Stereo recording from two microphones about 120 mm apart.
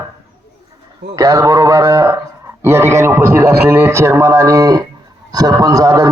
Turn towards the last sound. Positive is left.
turn(degrees=-30)  # may be behind; listen again after turning